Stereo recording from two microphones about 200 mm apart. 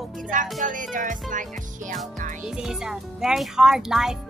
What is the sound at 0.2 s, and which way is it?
Music, 40° right (ahead or behind).